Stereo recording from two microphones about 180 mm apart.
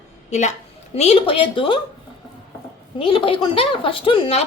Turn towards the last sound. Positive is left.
turn(degrees=30)  # may be behind; listen again after turning